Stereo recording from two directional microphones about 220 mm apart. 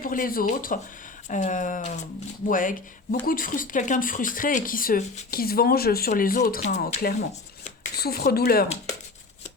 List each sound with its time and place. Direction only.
0.0 s speech: 40° left (ahead or behind)
7.9 s speech: 45° left (ahead or behind)